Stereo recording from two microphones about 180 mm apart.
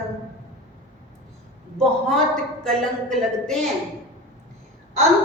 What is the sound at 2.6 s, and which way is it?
A woman's voice, 5° left (ahead or behind).